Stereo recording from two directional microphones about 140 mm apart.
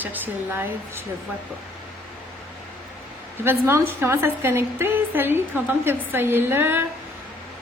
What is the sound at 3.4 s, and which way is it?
A woman's voice, 15° right (ahead or behind).